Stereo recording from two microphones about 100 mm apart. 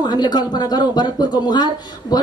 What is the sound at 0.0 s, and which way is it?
Speech, 45° left (ahead or behind).